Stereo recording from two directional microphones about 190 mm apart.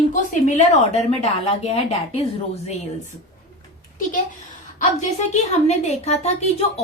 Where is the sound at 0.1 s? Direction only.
40° left (ahead or behind).